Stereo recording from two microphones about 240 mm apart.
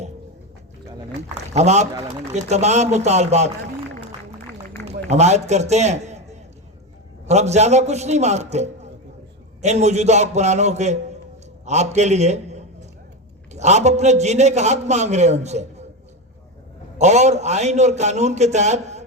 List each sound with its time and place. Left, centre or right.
1.5 s a man's voice: right
5.0 s a man's voice: right
17.0 s a man's voice: right